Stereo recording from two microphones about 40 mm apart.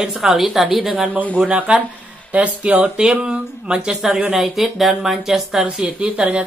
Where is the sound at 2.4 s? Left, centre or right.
Right.